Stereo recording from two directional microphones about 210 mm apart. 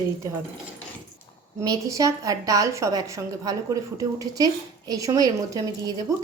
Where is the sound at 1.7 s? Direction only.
15° right (ahead or behind).